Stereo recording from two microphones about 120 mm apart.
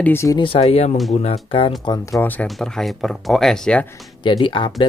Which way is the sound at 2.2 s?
15° left (ahead or behind).